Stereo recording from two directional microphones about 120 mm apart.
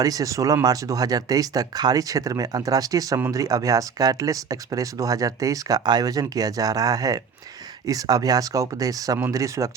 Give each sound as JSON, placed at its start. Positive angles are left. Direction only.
{"t": 0.0, "sound": "speech", "side_deg": -30}